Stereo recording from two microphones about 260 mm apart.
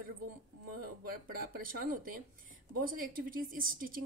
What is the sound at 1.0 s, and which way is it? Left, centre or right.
A woman's voice, right.